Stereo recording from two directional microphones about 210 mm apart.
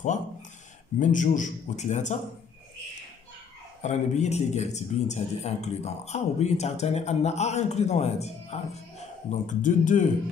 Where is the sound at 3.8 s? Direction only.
35° left (ahead or behind).